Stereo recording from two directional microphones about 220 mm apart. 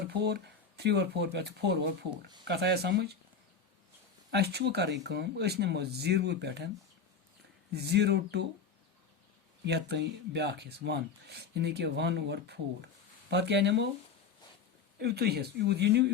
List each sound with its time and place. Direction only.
0.1 s speech: 50° right (ahead or behind)
4.3 s speech: 50° right (ahead or behind)
7.7 s speech: 50° right (ahead or behind)
9.6 s speech: 50° right (ahead or behind)
14.9 s speech: 45° right (ahead or behind)